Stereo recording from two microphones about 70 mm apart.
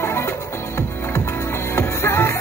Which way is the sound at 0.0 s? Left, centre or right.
Left.